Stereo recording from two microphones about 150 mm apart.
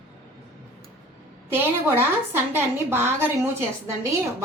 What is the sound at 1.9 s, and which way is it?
A woman's voice, 15° right (ahead or behind).